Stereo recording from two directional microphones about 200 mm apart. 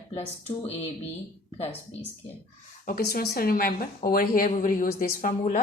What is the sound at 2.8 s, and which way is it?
Speech, 50° left (ahead or behind).